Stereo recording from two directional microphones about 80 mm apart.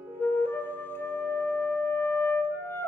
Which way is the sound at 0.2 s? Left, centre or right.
Left.